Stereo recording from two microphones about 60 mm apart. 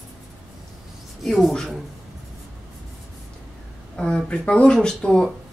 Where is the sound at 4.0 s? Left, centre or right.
Centre.